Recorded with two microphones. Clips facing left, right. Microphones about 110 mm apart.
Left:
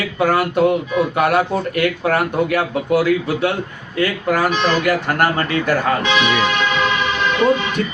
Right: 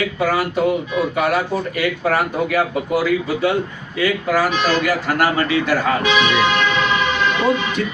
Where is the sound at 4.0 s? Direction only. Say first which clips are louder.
Even; 55° left (ahead or behind).